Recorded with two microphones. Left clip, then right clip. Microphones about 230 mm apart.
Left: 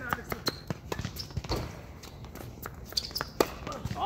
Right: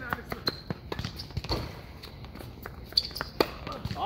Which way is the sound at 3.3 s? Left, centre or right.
Centre.